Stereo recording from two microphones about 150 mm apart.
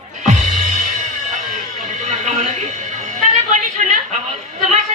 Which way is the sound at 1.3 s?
55° right (ahead or behind).